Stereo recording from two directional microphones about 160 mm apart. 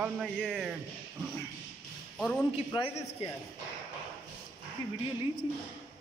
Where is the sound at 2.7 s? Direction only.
30° left (ahead or behind).